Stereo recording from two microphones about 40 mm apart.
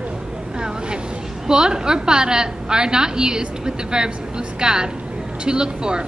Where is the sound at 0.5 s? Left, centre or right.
Right.